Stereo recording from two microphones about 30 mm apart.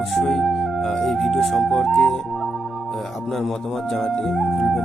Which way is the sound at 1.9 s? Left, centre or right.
Centre.